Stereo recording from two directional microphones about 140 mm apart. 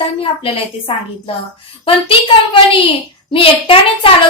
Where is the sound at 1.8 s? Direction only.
40° left (ahead or behind).